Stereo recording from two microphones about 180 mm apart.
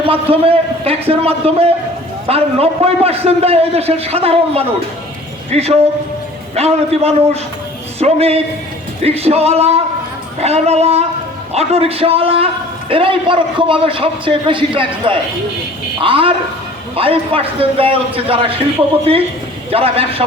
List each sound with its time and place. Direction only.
0.0 s a man's voice: 30° right (ahead or behind)
19.7 s a man's voice: 30° right (ahead or behind)